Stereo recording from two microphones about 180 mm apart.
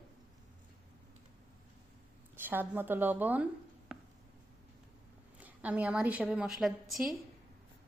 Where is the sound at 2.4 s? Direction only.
10° right (ahead or behind).